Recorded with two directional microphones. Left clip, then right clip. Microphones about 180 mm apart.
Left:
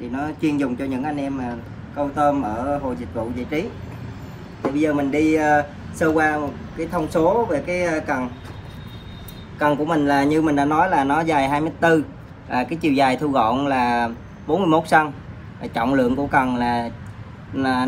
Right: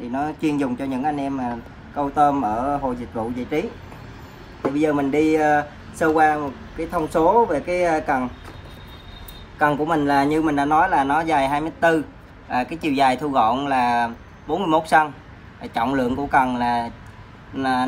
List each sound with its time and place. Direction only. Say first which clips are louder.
0.1 s speech: right 1 dB; 15° right (ahead or behind)
4.6 s speech: even; 15° right (ahead or behind)
9.6 s speech: even; 10° right (ahead or behind)